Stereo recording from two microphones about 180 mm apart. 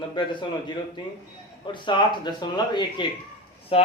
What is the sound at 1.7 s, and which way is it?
Speech, 25° left (ahead or behind).